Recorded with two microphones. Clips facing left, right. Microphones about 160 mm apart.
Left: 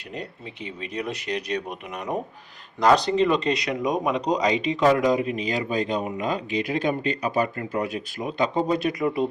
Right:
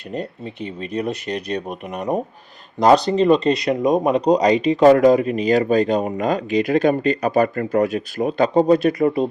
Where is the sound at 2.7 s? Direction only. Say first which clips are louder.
Right 5 dB; 30° right (ahead or behind).